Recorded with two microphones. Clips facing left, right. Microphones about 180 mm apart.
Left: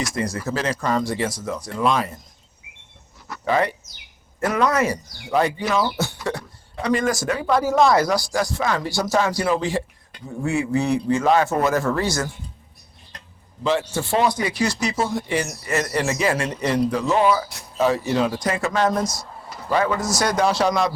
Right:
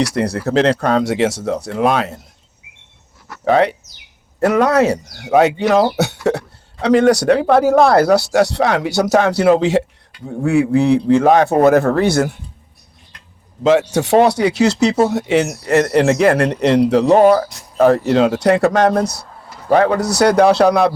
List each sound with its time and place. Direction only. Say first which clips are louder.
0.0 s speech: right 8 dB; 70° right (ahead or behind)
3.4 s speech: right 7 dB; 70° right (ahead or behind)
10.2 s speech: right 8 dB; 60° right (ahead or behind)
13.7 s speech: right 9 dB; 75° right (ahead or behind)
17.1 s speech: right 9 dB; 50° right (ahead or behind)